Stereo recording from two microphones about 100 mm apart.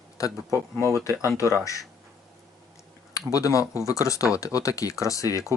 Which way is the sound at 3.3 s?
35° left (ahead or behind).